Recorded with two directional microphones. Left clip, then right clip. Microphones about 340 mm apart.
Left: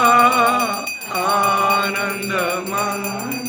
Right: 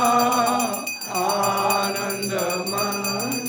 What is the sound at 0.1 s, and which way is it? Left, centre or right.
Music, centre.